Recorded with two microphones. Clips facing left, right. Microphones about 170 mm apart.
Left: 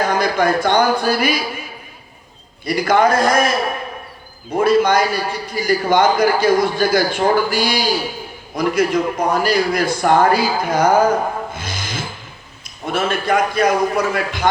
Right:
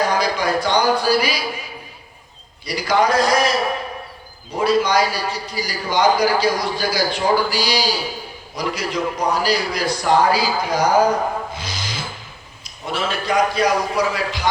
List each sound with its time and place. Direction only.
0.1 s a man's voice: 50° left (ahead or behind)
2.6 s a man's voice: 50° left (ahead or behind)
4.5 s a man's voice: 50° left (ahead or behind)
11.5 s rub: 50° left (ahead or behind)
12.6 s a man's voice: 50° left (ahead or behind)